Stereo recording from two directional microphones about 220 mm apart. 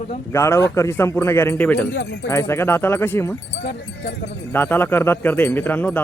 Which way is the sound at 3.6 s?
50° left (ahead or behind).